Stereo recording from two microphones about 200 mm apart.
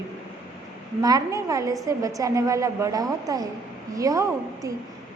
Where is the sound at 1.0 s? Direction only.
15° right (ahead or behind).